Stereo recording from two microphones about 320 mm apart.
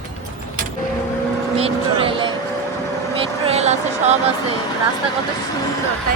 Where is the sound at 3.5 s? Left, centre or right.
Centre.